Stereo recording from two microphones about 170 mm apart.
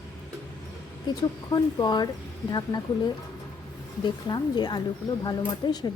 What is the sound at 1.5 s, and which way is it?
Speech, 25° left (ahead or behind).